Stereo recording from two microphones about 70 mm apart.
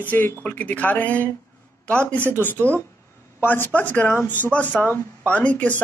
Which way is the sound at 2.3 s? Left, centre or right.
Left.